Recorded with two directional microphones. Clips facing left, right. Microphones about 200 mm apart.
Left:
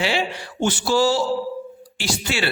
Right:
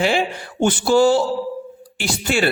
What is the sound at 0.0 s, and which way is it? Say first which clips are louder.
A man's voice: right 4 dB; 50° right (ahead or behind).